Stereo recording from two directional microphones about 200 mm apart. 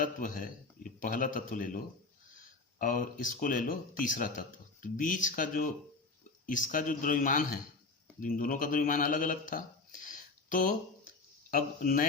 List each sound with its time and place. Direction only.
0.0 s a man's voice: 45° left (ahead or behind)
2.8 s a man's voice: 40° left (ahead or behind)